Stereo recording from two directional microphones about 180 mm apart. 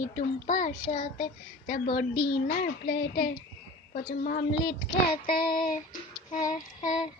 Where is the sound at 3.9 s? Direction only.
50° left (ahead or behind).